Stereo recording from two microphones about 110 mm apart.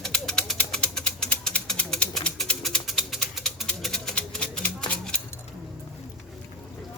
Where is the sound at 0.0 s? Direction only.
5° left (ahead or behind).